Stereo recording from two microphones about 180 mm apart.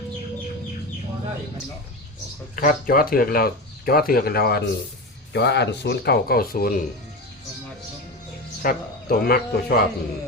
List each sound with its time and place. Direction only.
2.6 s speech: 50° left (ahead or behind)
8.6 s speech: 55° left (ahead or behind)